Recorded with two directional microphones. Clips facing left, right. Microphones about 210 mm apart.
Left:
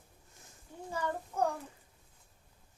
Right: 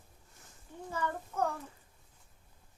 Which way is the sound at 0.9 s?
15° left (ahead or behind).